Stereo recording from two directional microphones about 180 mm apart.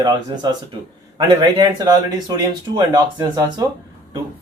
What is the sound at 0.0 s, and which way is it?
Speech, 25° right (ahead or behind).